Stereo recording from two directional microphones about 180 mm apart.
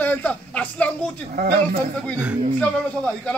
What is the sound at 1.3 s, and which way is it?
Speech, 55° right (ahead or behind).